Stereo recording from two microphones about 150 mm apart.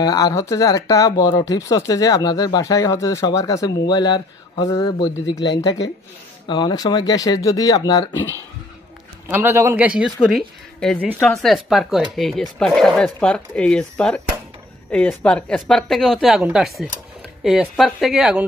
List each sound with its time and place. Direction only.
0.0 s speech: 25° left (ahead or behind)
9.3 s a man's voice: 15° right (ahead or behind); by 11.0 s centre (ahead or behind)
11.0 s a man's voice: 10° right (ahead or behind)